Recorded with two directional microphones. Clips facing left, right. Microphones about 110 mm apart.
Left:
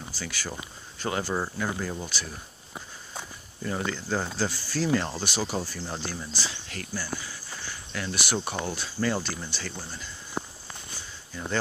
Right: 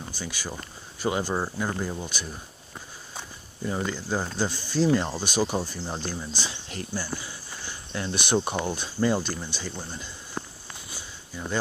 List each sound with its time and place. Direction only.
0.1 s speech: 15° right (ahead or behind)
3.7 s speech: 10° right (ahead or behind)
7.2 s cricket: 25° right (ahead or behind)
8.6 s speech: 20° right (ahead or behind)
10.4 s walk: 15° left (ahead or behind)
10.9 s a sound: 10° right (ahead or behind)